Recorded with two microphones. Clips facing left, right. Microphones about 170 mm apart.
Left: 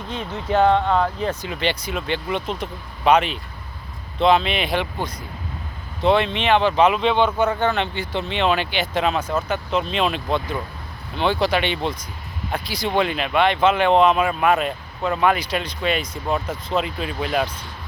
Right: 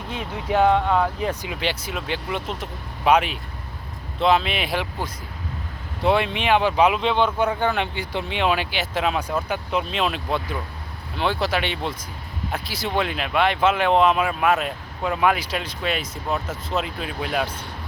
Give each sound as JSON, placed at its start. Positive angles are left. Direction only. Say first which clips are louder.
{"t": 0.1, "sound": "speech", "louder": "left 1 dB", "side_deg": -10}
{"t": 6.0, "sound": "speech", "louder": "left 2 dB", "side_deg": -10}
{"t": 7.0, "sound": "speech", "louder": "left 2 dB", "side_deg": 55}
{"t": 7.3, "sound": "speech", "louder": "left 2 dB", "side_deg": -10}